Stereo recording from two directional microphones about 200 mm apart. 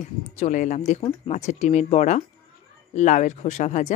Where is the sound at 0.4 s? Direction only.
40° left (ahead or behind).